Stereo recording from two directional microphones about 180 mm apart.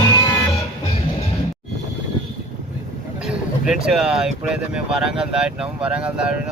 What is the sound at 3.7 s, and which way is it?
Speech, 5° right (ahead or behind).